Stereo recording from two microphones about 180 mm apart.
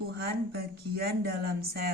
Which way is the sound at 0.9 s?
60° right (ahead or behind).